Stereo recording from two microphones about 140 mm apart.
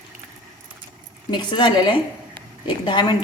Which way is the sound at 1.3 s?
35° left (ahead or behind).